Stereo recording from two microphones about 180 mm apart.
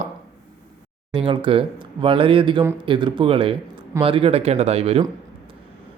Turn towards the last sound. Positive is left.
turn(degrees=-35)  # may be behind; listen again after turning